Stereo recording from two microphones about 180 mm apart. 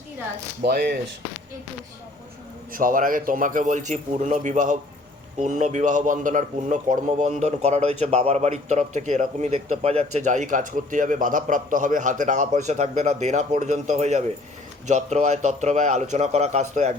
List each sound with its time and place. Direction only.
0.6 s speech: 60° right (ahead or behind)
2.7 s a man's voice: 50° right (ahead or behind)